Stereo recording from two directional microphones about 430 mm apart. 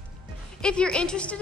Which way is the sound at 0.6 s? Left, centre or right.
Centre.